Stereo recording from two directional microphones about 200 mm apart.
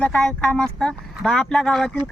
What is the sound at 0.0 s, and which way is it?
A woman's voice, 5° left (ahead or behind).